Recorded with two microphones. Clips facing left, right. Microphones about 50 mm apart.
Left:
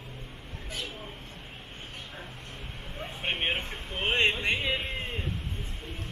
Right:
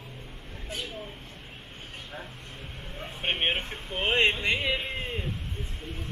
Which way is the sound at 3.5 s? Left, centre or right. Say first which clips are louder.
Right 2 dB; centre.